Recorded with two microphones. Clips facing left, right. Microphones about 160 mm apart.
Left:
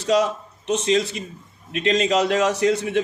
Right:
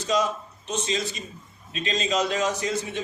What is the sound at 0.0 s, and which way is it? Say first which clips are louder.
A man's voice: left 5 dB; 70° left (ahead or behind).